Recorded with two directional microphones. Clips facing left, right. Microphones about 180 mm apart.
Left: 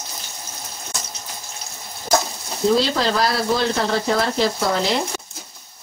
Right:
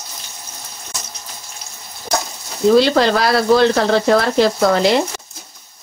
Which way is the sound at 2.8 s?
65° right (ahead or behind).